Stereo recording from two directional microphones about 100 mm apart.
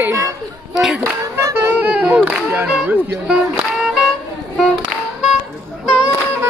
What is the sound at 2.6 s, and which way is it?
Music, 10° right (ahead or behind).